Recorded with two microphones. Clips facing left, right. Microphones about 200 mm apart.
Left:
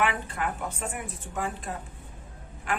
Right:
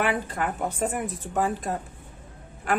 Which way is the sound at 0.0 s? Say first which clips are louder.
Right 2 dB; 40° right (ahead or behind).